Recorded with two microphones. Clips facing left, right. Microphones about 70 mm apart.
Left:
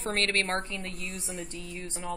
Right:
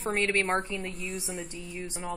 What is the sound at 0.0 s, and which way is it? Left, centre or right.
A woman's voice, centre.